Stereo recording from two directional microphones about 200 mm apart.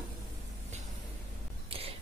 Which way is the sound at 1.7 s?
30° right (ahead or behind).